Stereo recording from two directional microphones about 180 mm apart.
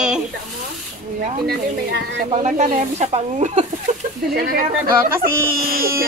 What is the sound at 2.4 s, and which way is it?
Speech, 40° right (ahead or behind).